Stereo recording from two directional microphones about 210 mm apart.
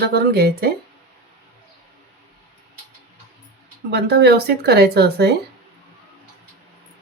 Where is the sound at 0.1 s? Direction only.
45° right (ahead or behind).